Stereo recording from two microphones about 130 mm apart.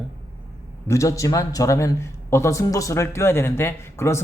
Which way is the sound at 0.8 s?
25° left (ahead or behind).